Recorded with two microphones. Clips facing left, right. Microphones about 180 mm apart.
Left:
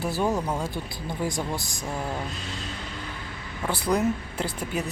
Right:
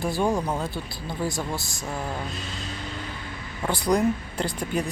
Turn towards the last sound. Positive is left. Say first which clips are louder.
# right 2 dB
turn(degrees=5)  # may be behind; listen again after turning